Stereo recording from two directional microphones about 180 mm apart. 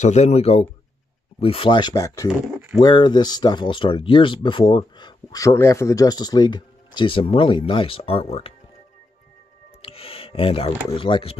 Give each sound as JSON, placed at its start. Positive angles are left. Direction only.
{"t": 0.0, "sound": "speech", "side_deg": 40}
{"t": 2.4, "sound": "speech", "side_deg": -5}
{"t": 2.8, "sound": "speech", "side_deg": 25}
{"t": 9.8, "sound": "a sound", "side_deg": 30}
{"t": 11.0, "sound": "speech", "side_deg": 30}